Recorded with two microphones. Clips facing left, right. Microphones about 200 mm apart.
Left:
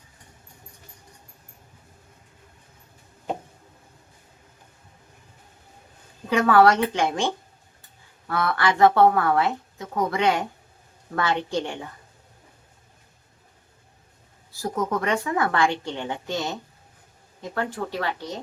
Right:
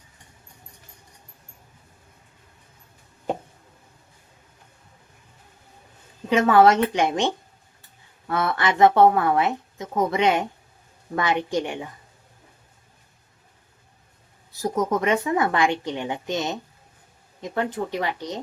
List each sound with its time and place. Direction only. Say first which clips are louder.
6.3 s a woman's voice: right 1 dB; 20° right (ahead or behind)
14.6 s speech: right 3 dB; 20° right (ahead or behind)